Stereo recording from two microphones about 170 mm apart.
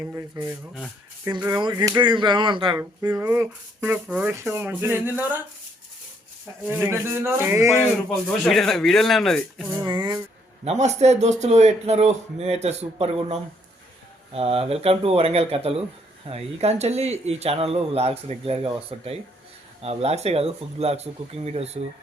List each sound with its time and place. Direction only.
0.4 s speech: 25° right (ahead or behind)
1.7 s speech: 20° right (ahead or behind)
6.7 s speech: 15° right (ahead or behind)
8.3 s speech: centre (ahead or behind)
9.6 s speech: 15° right (ahead or behind)
9.9 s a sound: 25° right (ahead or behind)
10.6 s a man's voice: 40° right (ahead or behind)